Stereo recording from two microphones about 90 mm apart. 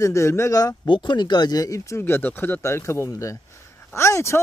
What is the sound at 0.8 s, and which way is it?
Speech, 60° left (ahead or behind).